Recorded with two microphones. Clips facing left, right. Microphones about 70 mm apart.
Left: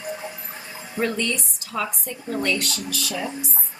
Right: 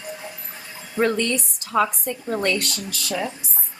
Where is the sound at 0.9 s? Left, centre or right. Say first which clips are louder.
Right 4 dB; right.